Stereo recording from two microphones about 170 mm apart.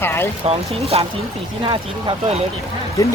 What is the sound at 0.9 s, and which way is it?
Speech, 35° right (ahead or behind).